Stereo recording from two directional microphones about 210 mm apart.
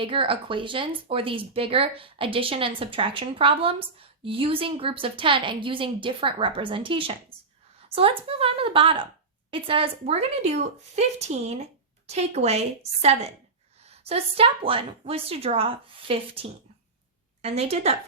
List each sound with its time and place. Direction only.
0.0 s speech: 25° right (ahead or behind)